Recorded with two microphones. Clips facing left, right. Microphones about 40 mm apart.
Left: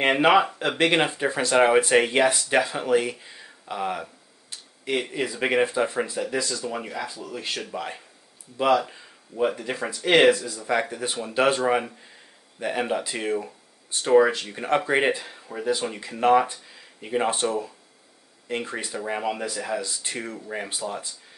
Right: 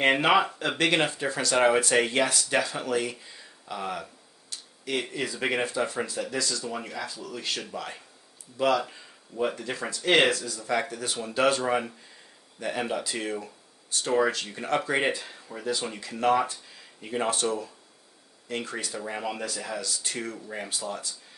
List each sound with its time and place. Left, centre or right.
0.0 s speech: centre
10.4 s speech: left